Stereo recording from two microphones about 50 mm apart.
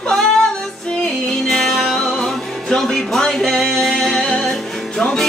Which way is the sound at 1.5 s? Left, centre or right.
Centre.